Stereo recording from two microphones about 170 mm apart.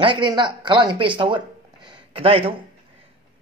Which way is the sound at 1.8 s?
30° right (ahead or behind).